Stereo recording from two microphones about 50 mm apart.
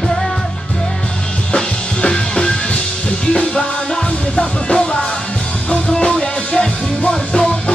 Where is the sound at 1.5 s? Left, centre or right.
Centre.